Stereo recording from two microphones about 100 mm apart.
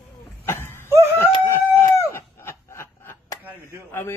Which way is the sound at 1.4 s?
25° left (ahead or behind).